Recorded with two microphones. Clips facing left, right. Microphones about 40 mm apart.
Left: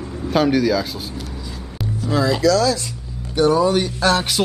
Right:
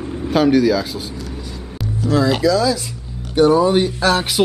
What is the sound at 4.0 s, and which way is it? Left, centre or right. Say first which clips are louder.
Speech: right 1 dB; centre.